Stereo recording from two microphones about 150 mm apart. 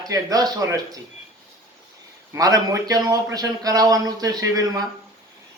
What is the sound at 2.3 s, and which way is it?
A man's voice, 25° right (ahead or behind).